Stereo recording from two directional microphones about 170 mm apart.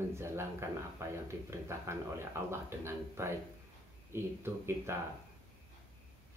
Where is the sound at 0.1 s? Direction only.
15° right (ahead or behind).